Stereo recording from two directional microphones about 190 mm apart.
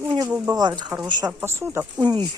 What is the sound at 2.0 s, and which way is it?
Speech, 25° right (ahead or behind).